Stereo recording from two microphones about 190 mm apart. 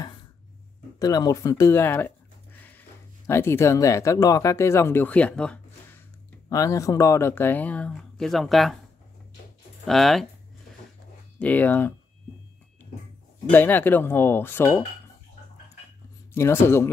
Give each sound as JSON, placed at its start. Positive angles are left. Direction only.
{"t": 0.9, "sound": "speech", "side_deg": 20}
{"t": 3.3, "sound": "speech", "side_deg": 15}
{"t": 6.5, "sound": "speech", "side_deg": 15}
{"t": 9.8, "sound": "speech", "side_deg": 0}
{"t": 11.3, "sound": "speech", "side_deg": 10}
{"t": 13.5, "sound": "speech", "side_deg": 10}
{"t": 16.3, "sound": "speech", "side_deg": 15}